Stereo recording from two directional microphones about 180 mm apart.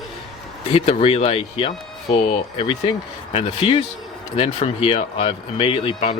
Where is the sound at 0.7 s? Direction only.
35° left (ahead or behind).